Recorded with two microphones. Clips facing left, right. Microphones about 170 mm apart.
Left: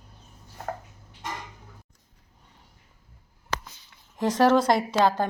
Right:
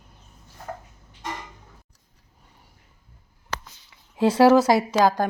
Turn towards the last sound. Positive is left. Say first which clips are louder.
# right 2 dB
turn(degrees=-10)  # may be behind; listen again after turning